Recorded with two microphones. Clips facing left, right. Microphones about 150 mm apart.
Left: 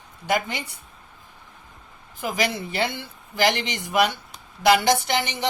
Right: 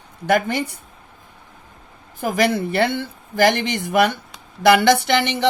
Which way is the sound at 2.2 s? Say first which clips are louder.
Right 7 dB; 55° right (ahead or behind).